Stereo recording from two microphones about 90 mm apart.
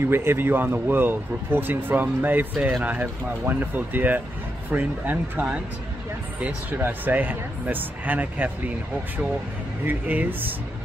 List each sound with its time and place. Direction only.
0.0 s speech: 25° right (ahead or behind)
9.8 s speech: 20° right (ahead or behind)